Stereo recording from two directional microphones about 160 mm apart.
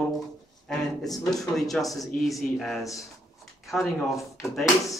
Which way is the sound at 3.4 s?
Centre (ahead or behind).